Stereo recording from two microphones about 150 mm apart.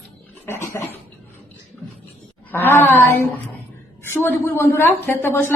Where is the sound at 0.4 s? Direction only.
20° left (ahead or behind).